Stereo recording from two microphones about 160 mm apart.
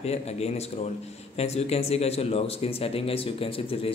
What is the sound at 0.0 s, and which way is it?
A man's voice, 40° left (ahead or behind).